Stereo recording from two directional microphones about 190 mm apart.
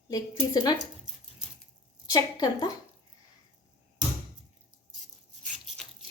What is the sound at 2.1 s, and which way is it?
Speech, 20° left (ahead or behind).